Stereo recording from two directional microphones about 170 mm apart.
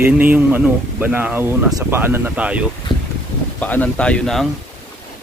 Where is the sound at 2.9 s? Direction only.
Centre (ahead or behind).